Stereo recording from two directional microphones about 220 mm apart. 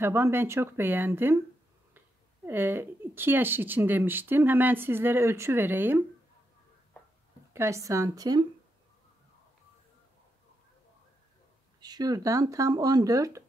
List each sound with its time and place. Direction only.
0.0 s speech: 10° right (ahead or behind)
7.5 s speech: 15° right (ahead or behind)
11.8 s speech: 20° right (ahead or behind)